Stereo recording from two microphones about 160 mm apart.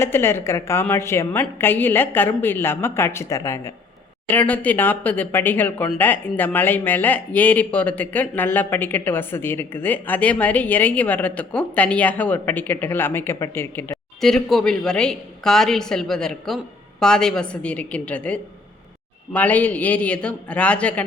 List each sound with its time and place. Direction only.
0.0 s speech: 15° left (ahead or behind)
14.2 s a woman's voice: centre (ahead or behind)